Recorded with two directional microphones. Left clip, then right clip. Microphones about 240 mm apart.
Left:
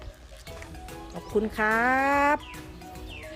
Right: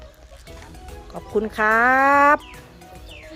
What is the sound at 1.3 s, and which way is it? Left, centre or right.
Speech, centre.